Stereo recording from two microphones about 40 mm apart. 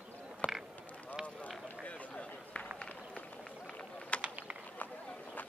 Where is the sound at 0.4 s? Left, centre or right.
Left.